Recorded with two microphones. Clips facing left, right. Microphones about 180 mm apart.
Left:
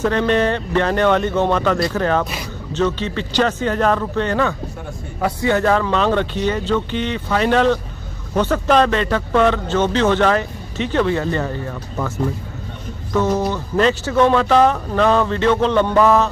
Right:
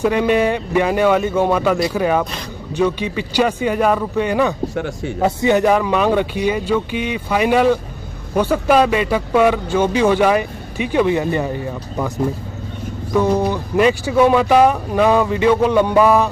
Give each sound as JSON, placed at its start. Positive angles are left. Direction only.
{"t": 0.0, "sound": "speech", "side_deg": -10}
{"t": 4.7, "sound": "a man's voice", "side_deg": -90}
{"t": 5.2, "sound": "speech", "side_deg": -20}
{"t": 13.1, "sound": "speech", "side_deg": -15}